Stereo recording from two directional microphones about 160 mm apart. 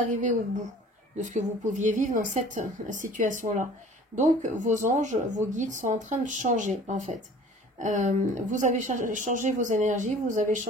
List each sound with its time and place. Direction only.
0.0 s a woman's voice: 50° right (ahead or behind)